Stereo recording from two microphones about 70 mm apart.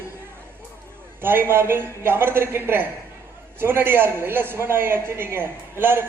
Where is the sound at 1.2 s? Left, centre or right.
Right.